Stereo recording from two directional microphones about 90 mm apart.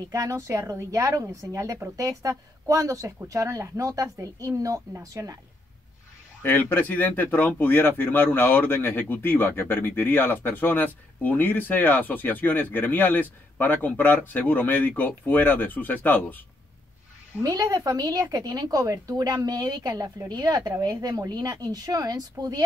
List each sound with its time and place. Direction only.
0.1 s speech: 35° right (ahead or behind)
6.4 s speech: 20° left (ahead or behind)
17.4 s a woman's voice: 40° right (ahead or behind)